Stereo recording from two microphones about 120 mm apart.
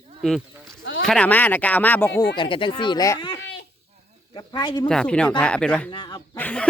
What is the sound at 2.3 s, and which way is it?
Speech, 45° left (ahead or behind).